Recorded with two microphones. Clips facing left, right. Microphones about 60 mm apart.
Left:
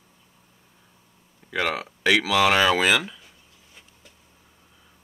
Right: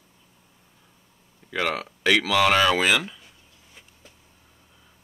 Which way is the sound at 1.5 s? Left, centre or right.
Centre.